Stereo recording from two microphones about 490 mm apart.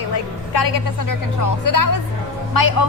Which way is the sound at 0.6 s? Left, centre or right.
Left.